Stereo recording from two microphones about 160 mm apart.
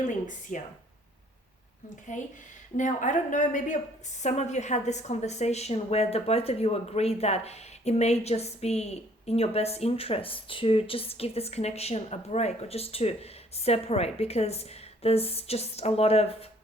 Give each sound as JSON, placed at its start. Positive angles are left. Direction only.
{"t": 0.5, "sound": "a woman's voice", "side_deg": 55}
{"t": 2.1, "sound": "a woman's voice", "side_deg": 50}